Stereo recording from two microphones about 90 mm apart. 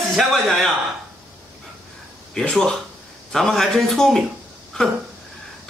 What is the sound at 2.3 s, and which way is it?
A man's voice, 10° left (ahead or behind).